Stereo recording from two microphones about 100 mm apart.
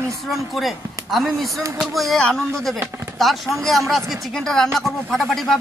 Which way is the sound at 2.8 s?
25° right (ahead or behind).